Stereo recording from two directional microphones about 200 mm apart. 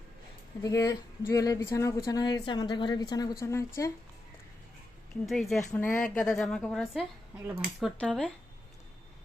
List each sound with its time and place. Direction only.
0.6 s a woman's voice: 15° left (ahead or behind)
5.2 s a woman's voice: centre (ahead or behind)